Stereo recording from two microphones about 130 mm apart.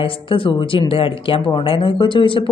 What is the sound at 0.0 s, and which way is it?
Speech, 45° left (ahead or behind).